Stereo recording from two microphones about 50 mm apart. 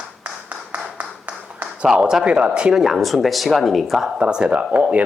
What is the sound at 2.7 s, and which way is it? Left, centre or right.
Speech, centre.